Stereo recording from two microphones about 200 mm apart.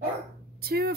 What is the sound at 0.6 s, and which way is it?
Speech, 50° right (ahead or behind).